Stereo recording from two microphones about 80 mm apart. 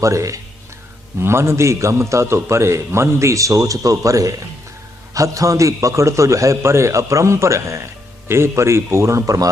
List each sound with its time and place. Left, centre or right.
0.0 s a man's voice: right